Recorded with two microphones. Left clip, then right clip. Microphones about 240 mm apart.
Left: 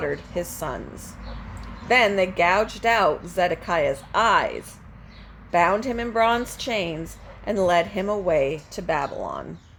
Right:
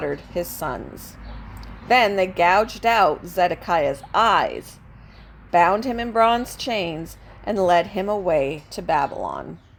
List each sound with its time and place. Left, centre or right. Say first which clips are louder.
0.0 s a woman's voice: right 1 dB; right